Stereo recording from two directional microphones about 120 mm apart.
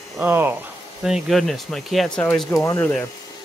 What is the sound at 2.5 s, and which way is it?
Speech, 25° left (ahead or behind).